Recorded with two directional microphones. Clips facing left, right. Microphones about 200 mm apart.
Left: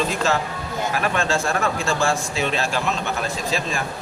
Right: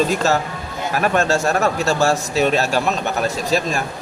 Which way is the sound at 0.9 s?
45° right (ahead or behind).